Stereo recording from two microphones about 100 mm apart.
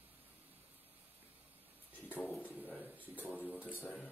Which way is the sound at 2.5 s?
15° right (ahead or behind).